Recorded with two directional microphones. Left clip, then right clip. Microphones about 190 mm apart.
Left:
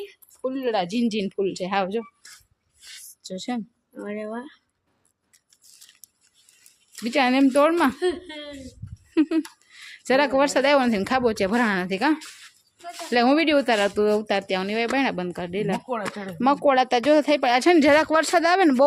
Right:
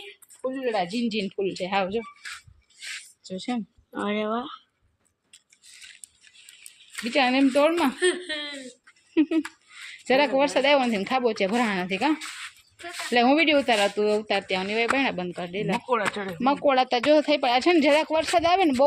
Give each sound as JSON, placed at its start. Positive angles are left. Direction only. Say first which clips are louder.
{"t": 0.4, "sound": "speech", "louder": "left 2 dB", "side_deg": 20}
{"t": 3.2, "sound": "a woman's voice", "louder": "left 1 dB", "side_deg": 5}
{"t": 3.9, "sound": "speech", "louder": "right 5 dB", "side_deg": -40}
{"t": 4.4, "sound": "speech", "louder": "right 5 dB", "side_deg": -20}
{"t": 7.0, "sound": "speech", "louder": "left 2 dB", "side_deg": 15}
{"t": 9.1, "sound": "speech", "louder": "left 1 dB", "side_deg": 5}